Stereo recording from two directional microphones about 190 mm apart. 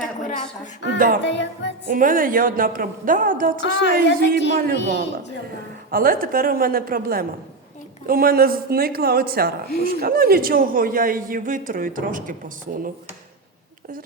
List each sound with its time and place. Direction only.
0.0 s a sound: 40° left (ahead or behind)
0.9 s a woman's voice: 45° right (ahead or behind)
1.2 s music: 70° left (ahead or behind)
1.9 s a woman's voice: 45° right (ahead or behind)
5.9 s a woman's voice: 50° right (ahead or behind)